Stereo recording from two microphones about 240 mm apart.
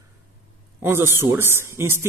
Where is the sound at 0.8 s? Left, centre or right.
Centre.